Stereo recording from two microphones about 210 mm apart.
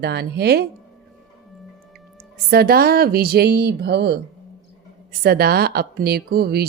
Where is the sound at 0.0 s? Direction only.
50° right (ahead or behind).